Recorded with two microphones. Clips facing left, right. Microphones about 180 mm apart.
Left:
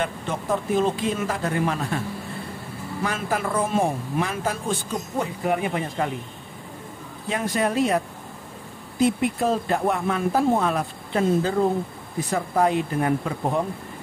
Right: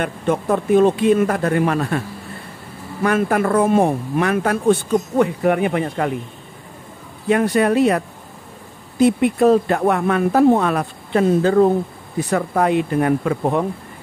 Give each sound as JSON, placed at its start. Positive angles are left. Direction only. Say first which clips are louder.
{"t": 0.0, "sound": "speech", "louder": "right 7 dB", "side_deg": -60}
{"t": 3.0, "sound": "speech", "louder": "right 9 dB", "side_deg": -55}
{"t": 7.2, "sound": "speech", "louder": "right 8 dB", "side_deg": -65}
{"t": 9.0, "sound": "speech", "louder": "right 7 dB", "side_deg": -70}